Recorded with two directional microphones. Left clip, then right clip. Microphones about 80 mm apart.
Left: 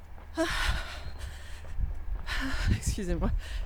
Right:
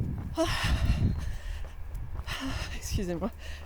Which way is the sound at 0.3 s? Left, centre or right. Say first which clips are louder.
Even; centre.